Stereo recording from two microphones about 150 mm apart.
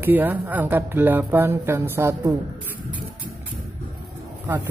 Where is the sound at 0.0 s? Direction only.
10° right (ahead or behind).